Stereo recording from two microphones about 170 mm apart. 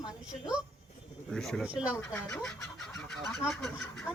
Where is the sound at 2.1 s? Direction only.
20° left (ahead or behind).